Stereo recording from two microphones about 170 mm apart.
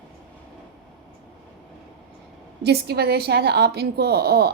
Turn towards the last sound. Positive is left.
turn(degrees=-70)  # may be behind; listen again after turning